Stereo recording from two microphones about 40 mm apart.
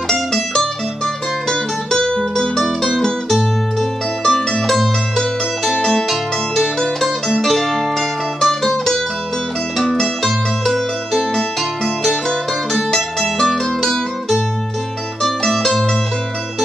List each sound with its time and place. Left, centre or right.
0.1 s music: centre
4.2 s music: centre
9.8 s music: centre
15.2 s mandolin: centre